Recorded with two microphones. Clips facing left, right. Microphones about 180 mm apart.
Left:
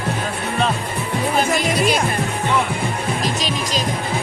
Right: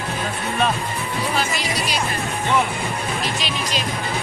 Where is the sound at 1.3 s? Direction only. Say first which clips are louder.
Left 8 dB; 50° left (ahead or behind).